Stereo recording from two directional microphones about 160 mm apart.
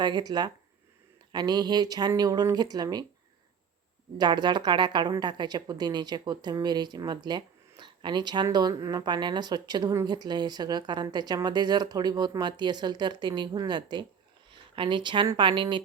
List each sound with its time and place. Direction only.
0.0 s speech: 25° right (ahead or behind)
4.2 s speech: 25° right (ahead or behind)